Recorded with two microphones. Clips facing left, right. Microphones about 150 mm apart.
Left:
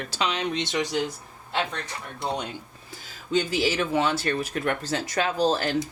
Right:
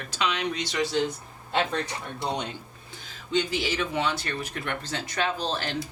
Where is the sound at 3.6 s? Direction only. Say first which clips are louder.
Left 4 dB; 40° left (ahead or behind).